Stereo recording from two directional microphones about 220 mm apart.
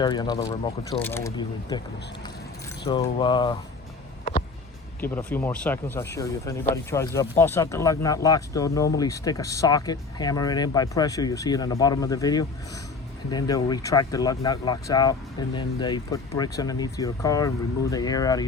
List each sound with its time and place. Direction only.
0.0 s speech: 20° left (ahead or behind)
2.8 s speech: 20° left (ahead or behind)
4.9 s speech: 10° left (ahead or behind)